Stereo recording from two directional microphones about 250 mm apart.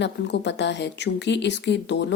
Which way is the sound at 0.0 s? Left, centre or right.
Left.